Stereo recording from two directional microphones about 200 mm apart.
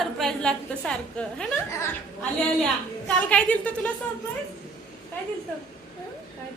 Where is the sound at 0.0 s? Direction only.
Centre (ahead or behind).